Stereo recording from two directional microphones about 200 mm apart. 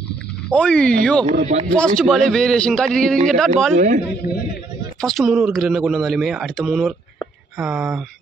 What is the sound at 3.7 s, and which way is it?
Speech, 40° right (ahead or behind).